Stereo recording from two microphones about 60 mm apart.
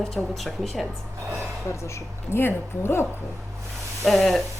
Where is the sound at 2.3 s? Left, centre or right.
Left.